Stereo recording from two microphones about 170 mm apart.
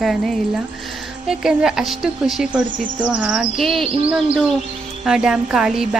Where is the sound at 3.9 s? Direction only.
35° right (ahead or behind).